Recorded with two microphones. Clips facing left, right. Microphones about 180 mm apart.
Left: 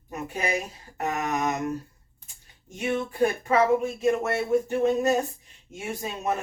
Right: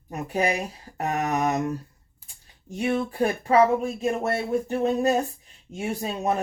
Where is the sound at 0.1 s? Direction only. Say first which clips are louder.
Right 4 dB; 35° right (ahead or behind).